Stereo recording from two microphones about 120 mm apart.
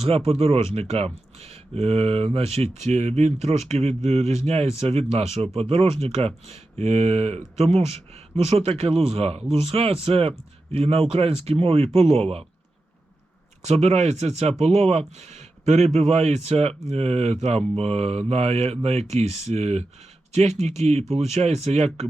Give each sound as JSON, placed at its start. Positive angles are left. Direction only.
{"t": 0.3, "sound": "speech", "side_deg": -55}
{"t": 13.7, "sound": "speech", "side_deg": -60}